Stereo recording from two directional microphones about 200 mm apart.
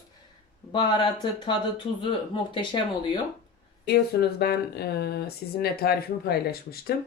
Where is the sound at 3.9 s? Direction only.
55° left (ahead or behind).